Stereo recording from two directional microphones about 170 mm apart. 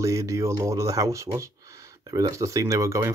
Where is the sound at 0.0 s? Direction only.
20° right (ahead or behind).